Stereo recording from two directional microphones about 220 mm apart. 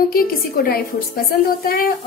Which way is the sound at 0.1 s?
40° left (ahead or behind).